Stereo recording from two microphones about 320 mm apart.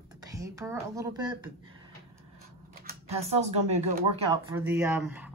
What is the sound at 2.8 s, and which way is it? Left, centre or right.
Speech, right.